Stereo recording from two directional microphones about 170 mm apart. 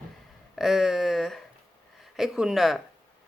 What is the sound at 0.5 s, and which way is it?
A woman's voice, centre (ahead or behind).